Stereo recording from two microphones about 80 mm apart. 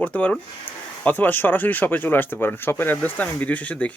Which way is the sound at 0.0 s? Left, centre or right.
Centre.